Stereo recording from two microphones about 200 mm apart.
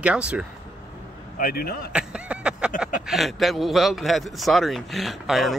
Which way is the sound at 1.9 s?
5° right (ahead or behind).